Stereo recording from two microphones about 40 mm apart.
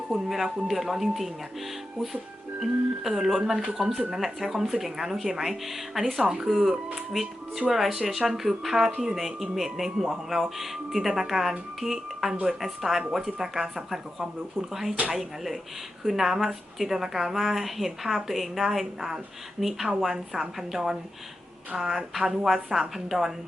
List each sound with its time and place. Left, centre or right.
0.1 s a woman's voice: centre
2.6 s a woman's voice: centre
6.2 s a woman's voice: right